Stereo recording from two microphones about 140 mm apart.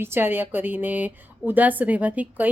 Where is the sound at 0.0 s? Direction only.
15° right (ahead or behind).